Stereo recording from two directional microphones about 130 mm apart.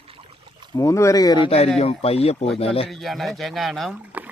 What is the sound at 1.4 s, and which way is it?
Speech, 50° left (ahead or behind).